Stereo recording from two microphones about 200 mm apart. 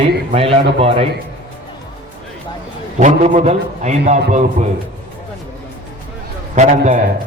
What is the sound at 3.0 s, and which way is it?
A man's voice, 35° right (ahead or behind).